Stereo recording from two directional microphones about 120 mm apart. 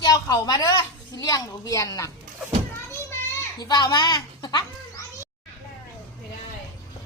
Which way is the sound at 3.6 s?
35° left (ahead or behind).